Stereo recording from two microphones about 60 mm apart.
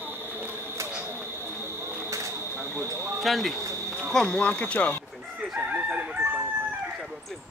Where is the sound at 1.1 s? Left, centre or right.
Right.